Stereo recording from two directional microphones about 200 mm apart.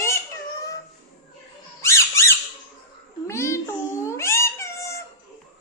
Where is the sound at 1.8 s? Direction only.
15° left (ahead or behind).